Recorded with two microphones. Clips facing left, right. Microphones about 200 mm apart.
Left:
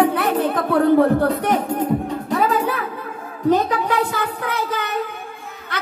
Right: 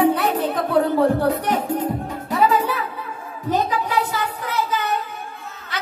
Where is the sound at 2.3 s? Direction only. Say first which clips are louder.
Right 1 dB; 50° left (ahead or behind).